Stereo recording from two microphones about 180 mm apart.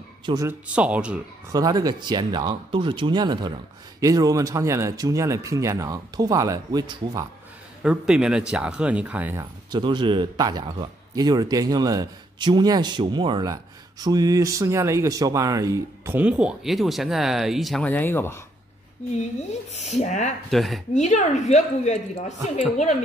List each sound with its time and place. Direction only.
0.2 s speech: 20° right (ahead or behind)
0.7 s speech: 5° right (ahead or behind)
1.5 s speech: 20° right (ahead or behind)
7.8 s speech: 5° right (ahead or behind)
9.7 s speech: 25° right (ahead or behind); by 18.4 s 10° left (ahead or behind)
19.7 s a woman's voice: 40° left (ahead or behind)
20.4 s speech: centre (ahead or behind)
20.9 s a woman's voice: 40° left (ahead or behind)